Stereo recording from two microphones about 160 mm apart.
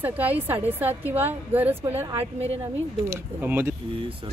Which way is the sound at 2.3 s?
40° right (ahead or behind).